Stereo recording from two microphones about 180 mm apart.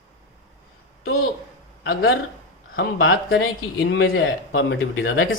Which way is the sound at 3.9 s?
90° left.